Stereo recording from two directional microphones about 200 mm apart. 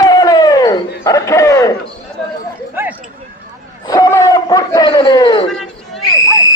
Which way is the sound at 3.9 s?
15° left (ahead or behind).